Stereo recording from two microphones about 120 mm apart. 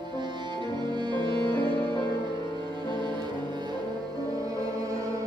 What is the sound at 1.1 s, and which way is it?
Music, 40° right (ahead or behind).